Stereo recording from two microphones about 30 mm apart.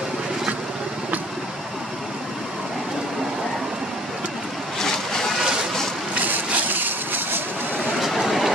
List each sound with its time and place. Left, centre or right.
4.7 s boat: centre
6.2 s a sound: right
8.0 s vehicle: centre